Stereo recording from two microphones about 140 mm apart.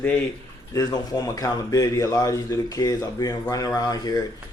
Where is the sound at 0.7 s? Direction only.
25° left (ahead or behind).